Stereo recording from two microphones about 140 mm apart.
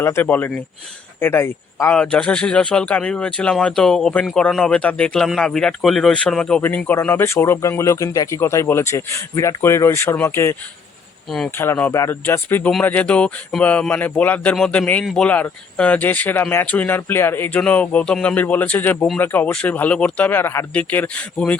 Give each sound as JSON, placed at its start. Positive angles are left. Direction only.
{"t": 0.0, "sound": "speech", "side_deg": 15}
{"t": 2.0, "sound": "speech", "side_deg": 5}
{"t": 11.3, "sound": "speech", "side_deg": 0}
{"t": 11.5, "sound": "speech", "side_deg": 15}